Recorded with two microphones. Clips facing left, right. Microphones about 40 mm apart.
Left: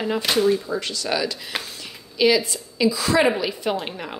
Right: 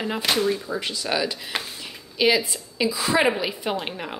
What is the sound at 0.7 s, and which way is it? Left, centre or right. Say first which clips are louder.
A woman's voice: left 1 dB; centre.